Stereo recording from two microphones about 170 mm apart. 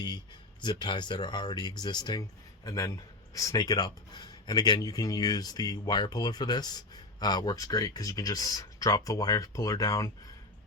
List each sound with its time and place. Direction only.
0.6 s speech: 25° left (ahead or behind)